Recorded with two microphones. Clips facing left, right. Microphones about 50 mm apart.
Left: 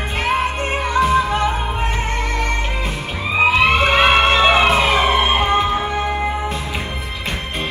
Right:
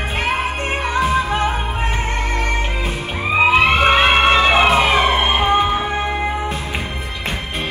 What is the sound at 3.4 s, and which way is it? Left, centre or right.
Music, right.